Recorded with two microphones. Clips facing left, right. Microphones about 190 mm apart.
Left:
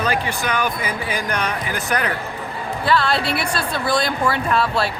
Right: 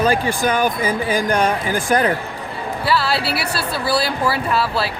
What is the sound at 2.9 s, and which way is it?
A woman's voice, 5° right (ahead or behind).